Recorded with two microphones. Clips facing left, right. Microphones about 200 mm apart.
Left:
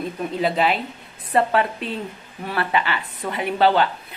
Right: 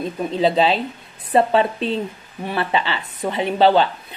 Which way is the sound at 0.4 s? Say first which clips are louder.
Right 4 dB; 25° right (ahead or behind).